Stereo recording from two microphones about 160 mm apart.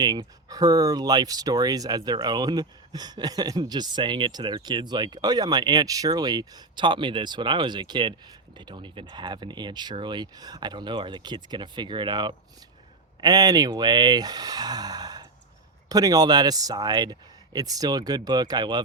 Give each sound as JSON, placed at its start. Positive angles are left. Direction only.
{"t": 0.0, "sound": "speech", "side_deg": -25}